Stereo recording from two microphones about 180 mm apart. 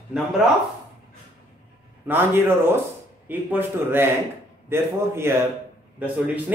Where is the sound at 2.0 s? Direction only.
10° right (ahead or behind).